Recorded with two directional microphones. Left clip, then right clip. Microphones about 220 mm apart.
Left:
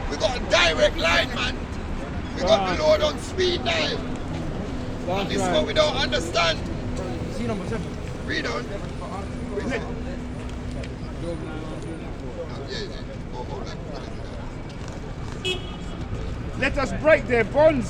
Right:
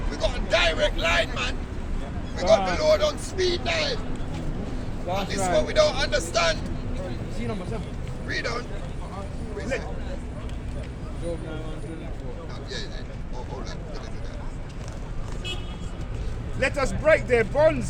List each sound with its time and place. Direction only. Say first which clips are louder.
0.1 s a sound: left 3 dB; 10° left (ahead or behind)
1.0 s speech: left 2 dB; 15° right (ahead or behind)
2.3 s a sound: even; 30° right (ahead or behind)
2.6 s speech: left 1 dB; 35° right (ahead or behind)
5.1 s speech: left 1 dB; 45° right (ahead or behind)
8.3 s speech: left 2 dB; 35° right (ahead or behind)
16.6 s speech: even; 45° right (ahead or behind)